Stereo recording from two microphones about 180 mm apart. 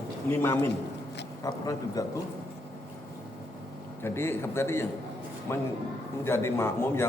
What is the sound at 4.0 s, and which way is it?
Speech, 15° left (ahead or behind).